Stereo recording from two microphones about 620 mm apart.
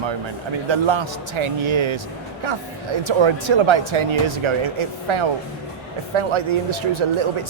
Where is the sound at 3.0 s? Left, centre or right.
Right.